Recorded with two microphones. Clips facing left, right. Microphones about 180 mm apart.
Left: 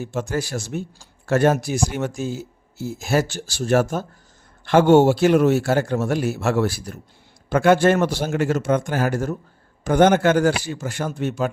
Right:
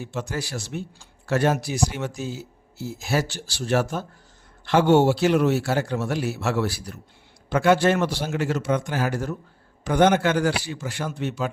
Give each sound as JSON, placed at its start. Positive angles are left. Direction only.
{"t": 0.0, "sound": "a man's voice", "side_deg": 45}